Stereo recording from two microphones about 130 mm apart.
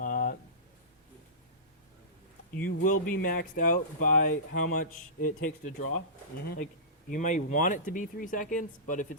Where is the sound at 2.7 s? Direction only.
90° left.